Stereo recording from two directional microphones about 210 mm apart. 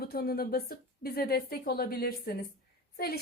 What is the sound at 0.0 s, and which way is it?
A woman's voice, 45° left (ahead or behind).